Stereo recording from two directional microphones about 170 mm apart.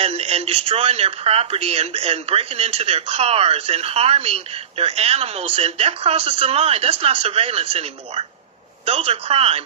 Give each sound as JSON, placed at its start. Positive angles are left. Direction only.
{"t": 0.0, "sound": "speech", "side_deg": -35}